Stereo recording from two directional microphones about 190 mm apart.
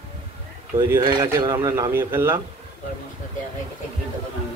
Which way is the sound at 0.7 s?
20° right (ahead or behind).